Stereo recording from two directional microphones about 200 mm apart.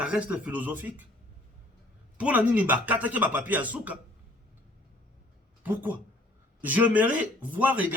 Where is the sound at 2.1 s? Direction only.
5° right (ahead or behind).